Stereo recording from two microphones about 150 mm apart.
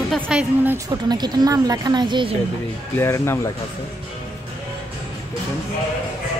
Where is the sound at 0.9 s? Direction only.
25° right (ahead or behind).